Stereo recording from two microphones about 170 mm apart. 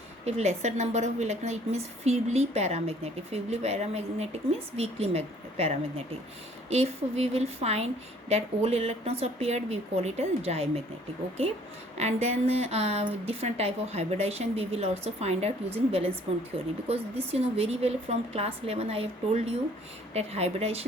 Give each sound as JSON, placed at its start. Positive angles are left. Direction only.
{"t": 0.3, "sound": "a woman's voice", "side_deg": -40}
{"t": 11.9, "sound": "a woman's voice", "side_deg": -40}
{"t": 17.3, "sound": "a woman's voice", "side_deg": -35}